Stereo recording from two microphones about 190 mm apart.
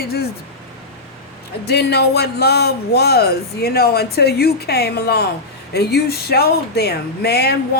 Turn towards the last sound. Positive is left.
turn(degrees=55)  # may be behind; listen again after turning